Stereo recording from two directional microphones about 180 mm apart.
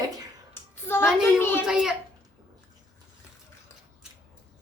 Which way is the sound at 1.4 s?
10° left (ahead or behind).